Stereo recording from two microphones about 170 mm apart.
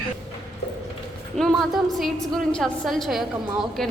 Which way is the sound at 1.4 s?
Centre (ahead or behind).